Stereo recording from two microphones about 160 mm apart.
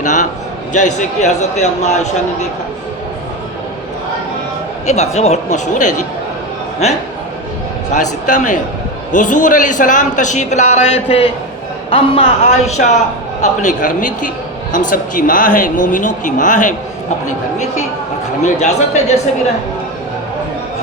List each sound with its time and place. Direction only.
0.0 s a man's voice: 50° left (ahead or behind)
4.9 s a man's voice: 45° left (ahead or behind)
7.9 s a man's voice: 50° left (ahead or behind)
18.4 s a man's voice: 45° left (ahead or behind)